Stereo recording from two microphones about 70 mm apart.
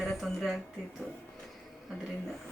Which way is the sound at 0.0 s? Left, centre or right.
Centre.